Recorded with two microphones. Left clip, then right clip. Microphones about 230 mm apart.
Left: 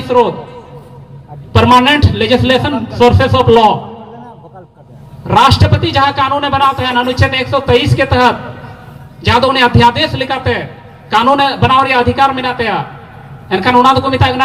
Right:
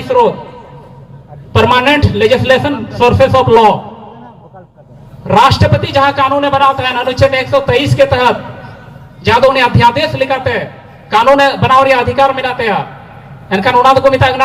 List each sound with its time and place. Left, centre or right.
1.5 s a man's voice: left
5.3 s a man's voice: left